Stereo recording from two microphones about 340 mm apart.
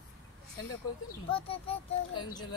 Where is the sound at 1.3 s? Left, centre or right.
Centre.